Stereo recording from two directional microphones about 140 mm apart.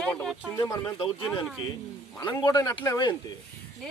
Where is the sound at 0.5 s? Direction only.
20° left (ahead or behind).